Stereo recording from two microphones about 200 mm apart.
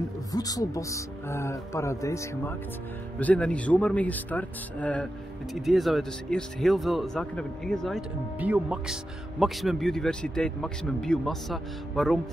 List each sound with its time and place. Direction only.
0.3 s speech: 20° left (ahead or behind); by 12.2 s centre (ahead or behind)